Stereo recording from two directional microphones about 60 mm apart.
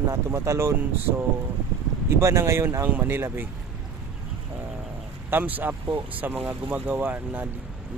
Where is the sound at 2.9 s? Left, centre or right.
Right.